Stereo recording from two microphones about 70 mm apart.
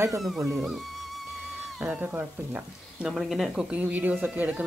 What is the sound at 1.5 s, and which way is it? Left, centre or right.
Speech, right.